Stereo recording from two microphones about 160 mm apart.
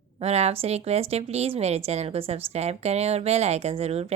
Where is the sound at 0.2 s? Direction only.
40° right (ahead or behind).